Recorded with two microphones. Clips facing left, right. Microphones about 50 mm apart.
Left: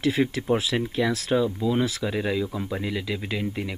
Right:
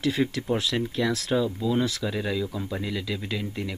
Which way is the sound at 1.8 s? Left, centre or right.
Centre.